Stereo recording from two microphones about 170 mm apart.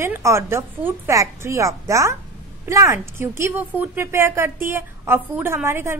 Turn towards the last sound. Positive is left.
turn(degrees=-15)  # may be behind; listen again after turning